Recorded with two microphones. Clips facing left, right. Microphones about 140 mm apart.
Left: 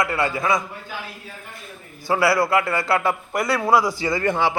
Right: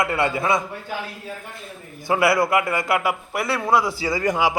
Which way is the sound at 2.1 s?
20° right (ahead or behind).